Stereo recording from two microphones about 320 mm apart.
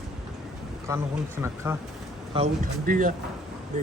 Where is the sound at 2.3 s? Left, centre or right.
Right.